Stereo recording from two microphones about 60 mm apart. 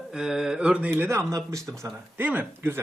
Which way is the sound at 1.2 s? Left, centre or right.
Right.